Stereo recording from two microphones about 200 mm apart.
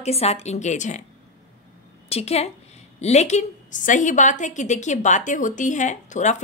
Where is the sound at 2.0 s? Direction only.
30° left (ahead or behind).